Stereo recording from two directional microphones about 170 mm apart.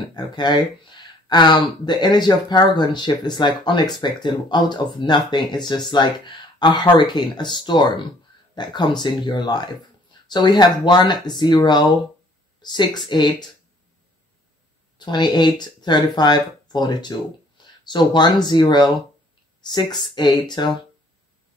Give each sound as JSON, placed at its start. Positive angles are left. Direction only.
{"t": 0.1, "sound": "speech", "side_deg": 25}
{"t": 15.0, "sound": "speech", "side_deg": 25}